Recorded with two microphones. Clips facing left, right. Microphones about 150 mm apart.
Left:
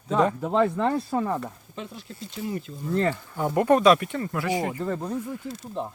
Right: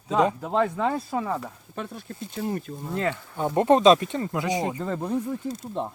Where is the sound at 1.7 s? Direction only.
55° right (ahead or behind).